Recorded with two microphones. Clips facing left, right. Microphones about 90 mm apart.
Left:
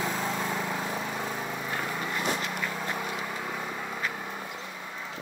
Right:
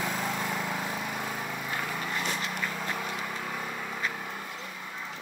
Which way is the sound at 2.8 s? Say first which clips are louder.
Left 1 dB; 15° left (ahead or behind).